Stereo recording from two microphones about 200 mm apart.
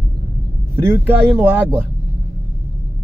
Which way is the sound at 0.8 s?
10° right (ahead or behind).